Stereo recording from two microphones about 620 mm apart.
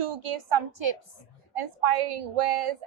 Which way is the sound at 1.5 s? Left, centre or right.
Right.